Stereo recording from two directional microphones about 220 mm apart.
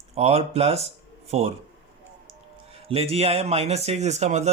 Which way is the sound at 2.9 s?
25° right (ahead or behind).